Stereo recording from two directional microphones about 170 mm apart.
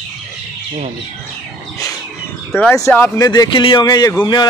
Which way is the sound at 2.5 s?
10° left (ahead or behind).